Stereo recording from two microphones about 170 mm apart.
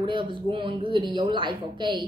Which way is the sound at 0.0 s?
30° right (ahead or behind).